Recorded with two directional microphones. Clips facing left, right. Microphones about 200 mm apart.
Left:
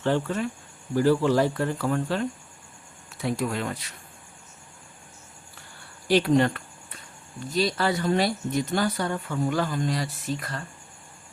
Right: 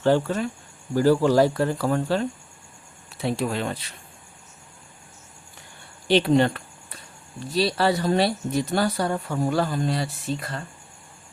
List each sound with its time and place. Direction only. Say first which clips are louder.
0.0 s speech: right 4 dB; 35° right (ahead or behind)
6.1 s speech: right 2 dB; 25° right (ahead or behind)